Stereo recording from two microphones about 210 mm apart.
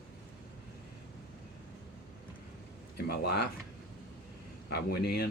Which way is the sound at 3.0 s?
50° left (ahead or behind).